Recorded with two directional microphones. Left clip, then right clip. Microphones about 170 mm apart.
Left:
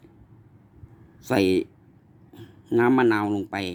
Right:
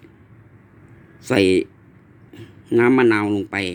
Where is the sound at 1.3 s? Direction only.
20° left (ahead or behind).